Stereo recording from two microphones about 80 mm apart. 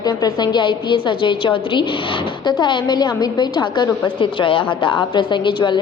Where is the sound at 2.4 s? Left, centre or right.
Left.